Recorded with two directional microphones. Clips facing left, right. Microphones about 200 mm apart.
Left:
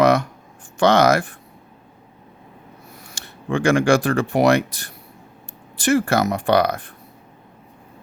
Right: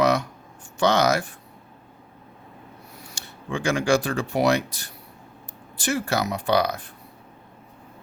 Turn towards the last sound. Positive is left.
turn(degrees=55)  # may be behind; listen again after turning